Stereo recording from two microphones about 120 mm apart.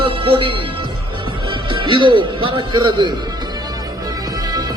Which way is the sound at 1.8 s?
40° right (ahead or behind).